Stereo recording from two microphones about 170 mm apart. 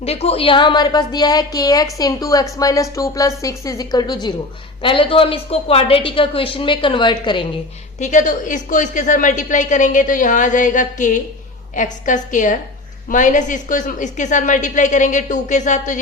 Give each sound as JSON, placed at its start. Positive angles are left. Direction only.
{"t": 0.0, "sound": "a woman's voice", "side_deg": 35}
{"t": 7.9, "sound": "a woman's voice", "side_deg": 45}